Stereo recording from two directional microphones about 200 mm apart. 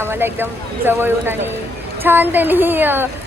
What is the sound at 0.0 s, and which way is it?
Speech, 10° right (ahead or behind).